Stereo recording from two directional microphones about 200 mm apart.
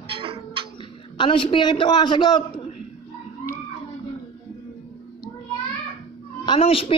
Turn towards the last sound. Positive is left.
turn(degrees=25)  # may be behind; listen again after turning